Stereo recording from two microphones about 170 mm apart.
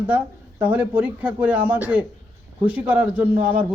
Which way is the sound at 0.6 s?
10° right (ahead or behind).